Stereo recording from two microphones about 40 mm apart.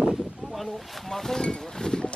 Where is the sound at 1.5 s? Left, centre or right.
Centre.